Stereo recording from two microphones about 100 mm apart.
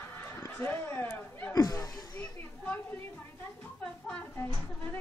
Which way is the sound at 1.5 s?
40° left (ahead or behind).